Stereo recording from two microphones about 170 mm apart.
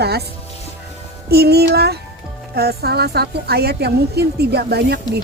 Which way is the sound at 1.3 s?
70° right (ahead or behind).